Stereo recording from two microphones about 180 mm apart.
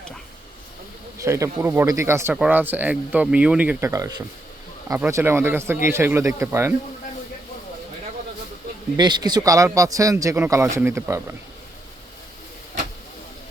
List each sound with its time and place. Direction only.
1.2 s speech: 15° right (ahead or behind)
9.0 s speech: 25° right (ahead or behind)